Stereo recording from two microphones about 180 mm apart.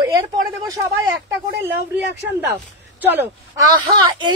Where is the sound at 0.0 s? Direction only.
20° right (ahead or behind).